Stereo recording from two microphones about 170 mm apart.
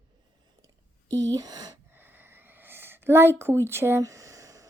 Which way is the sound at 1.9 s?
10° right (ahead or behind).